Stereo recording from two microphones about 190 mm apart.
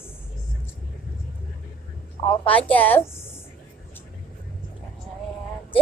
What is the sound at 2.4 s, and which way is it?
Speech, 10° left (ahead or behind).